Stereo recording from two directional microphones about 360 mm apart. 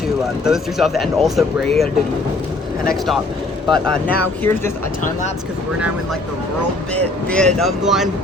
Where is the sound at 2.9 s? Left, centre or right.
Centre.